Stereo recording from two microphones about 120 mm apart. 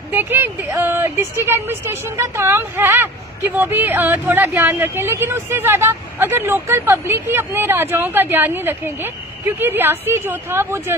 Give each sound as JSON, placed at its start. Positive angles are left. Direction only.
{"t": 0.1, "sound": "speech", "side_deg": -15}